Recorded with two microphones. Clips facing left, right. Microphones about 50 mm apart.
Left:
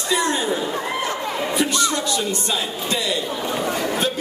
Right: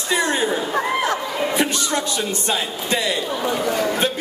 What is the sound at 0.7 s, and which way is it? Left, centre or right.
Chatter, right.